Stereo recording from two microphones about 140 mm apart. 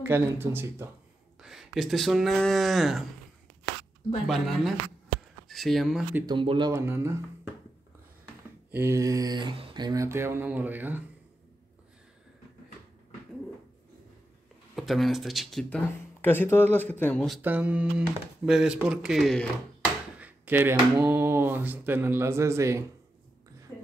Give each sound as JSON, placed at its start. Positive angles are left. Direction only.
{"t": 0.0, "sound": "speech", "side_deg": -15}
{"t": 1.4, "sound": "speech", "side_deg": -5}
{"t": 4.3, "sound": "speech", "side_deg": 0}
{"t": 6.2, "sound": "speech", "side_deg": -35}
{"t": 6.7, "sound": "speech", "side_deg": -20}
{"t": 8.7, "sound": "speech", "side_deg": -20}
{"t": 14.8, "sound": "speech", "side_deg": 0}
{"t": 15.7, "sound": "speech", "side_deg": 15}
{"t": 17.4, "sound": "speech", "side_deg": -15}
{"t": 20.2, "sound": "speech", "side_deg": -10}